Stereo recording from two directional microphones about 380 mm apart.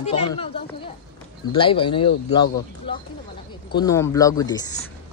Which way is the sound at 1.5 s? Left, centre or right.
Centre.